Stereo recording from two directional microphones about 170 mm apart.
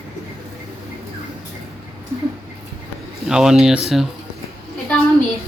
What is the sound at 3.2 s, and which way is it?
Speech, 5° right (ahead or behind).